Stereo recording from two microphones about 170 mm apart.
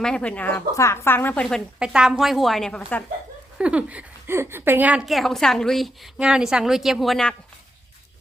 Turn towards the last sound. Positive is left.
turn(degrees=0)  # may be behind; listen again after turning